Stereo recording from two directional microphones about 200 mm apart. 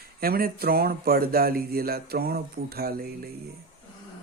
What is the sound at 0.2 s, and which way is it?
Speech, 50° right (ahead or behind).